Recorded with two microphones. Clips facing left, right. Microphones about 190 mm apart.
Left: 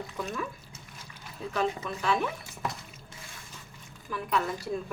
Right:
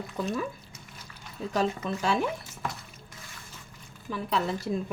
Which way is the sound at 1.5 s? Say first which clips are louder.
Right 2 dB; 30° right (ahead or behind).